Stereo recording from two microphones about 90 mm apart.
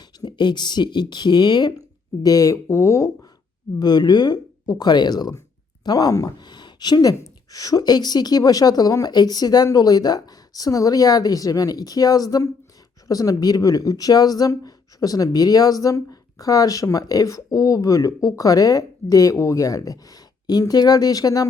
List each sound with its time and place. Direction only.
0.2 s speech: 55° left (ahead or behind)
2.2 s speech: 40° left (ahead or behind)
3.8 s speech: 50° left (ahead or behind)